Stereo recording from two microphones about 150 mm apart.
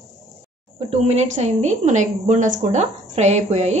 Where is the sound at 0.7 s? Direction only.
45° right (ahead or behind).